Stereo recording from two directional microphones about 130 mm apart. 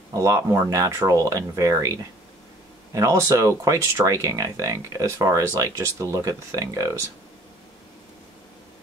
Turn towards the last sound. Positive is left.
turn(degrees=-25)  # may be behind; listen again after turning